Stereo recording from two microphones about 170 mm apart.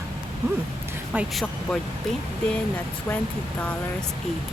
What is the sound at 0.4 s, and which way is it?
Speech, 15° right (ahead or behind).